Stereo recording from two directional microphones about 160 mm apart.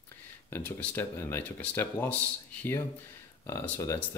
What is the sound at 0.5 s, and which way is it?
Speech, 15° left (ahead or behind).